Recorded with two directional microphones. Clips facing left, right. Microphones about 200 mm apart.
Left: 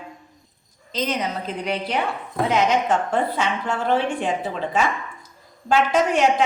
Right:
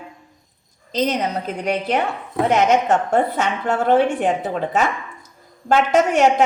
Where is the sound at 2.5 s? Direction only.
45° right (ahead or behind).